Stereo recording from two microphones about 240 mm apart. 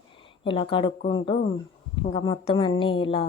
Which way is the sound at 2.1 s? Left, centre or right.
Left.